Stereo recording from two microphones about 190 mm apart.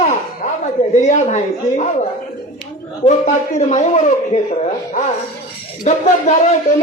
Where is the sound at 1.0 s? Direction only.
40° left (ahead or behind).